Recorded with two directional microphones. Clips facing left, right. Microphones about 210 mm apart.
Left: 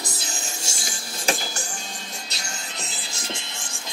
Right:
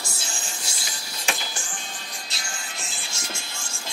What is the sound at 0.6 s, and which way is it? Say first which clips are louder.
Music: left 3 dB; 45° left (ahead or behind).